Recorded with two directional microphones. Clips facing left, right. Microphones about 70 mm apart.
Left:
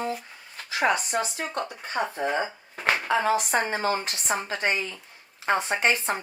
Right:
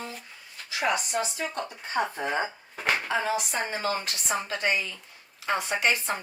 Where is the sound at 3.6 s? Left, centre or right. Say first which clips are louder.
Left 3 dB; left.